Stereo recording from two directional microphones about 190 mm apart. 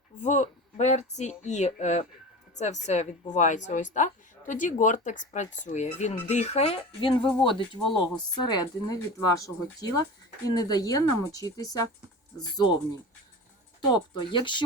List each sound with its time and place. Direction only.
0.2 s speech: 40° left (ahead or behind); by 11.8 s 20° left (ahead or behind)
13.9 s speech: 25° left (ahead or behind)